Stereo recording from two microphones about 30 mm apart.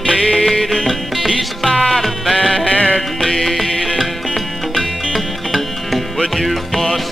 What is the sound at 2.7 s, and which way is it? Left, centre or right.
Music, left.